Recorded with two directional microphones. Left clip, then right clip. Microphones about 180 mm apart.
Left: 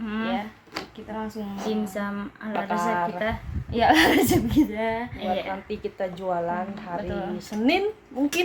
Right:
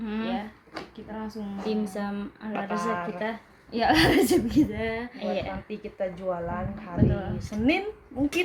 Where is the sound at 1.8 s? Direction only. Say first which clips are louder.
Left 2 dB; 30° right (ahead or behind).